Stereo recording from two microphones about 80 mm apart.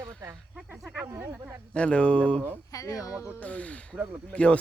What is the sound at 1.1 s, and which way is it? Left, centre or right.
Speech, right.